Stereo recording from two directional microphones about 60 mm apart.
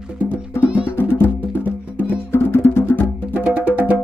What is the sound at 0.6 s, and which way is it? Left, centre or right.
Music, right.